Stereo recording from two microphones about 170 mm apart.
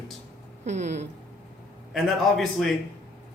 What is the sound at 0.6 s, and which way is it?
Speech, 40° right (ahead or behind).